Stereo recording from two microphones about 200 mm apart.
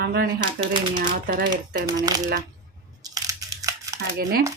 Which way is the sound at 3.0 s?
20° right (ahead or behind).